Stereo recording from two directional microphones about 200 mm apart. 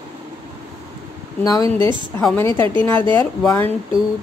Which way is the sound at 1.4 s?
15° left (ahead or behind).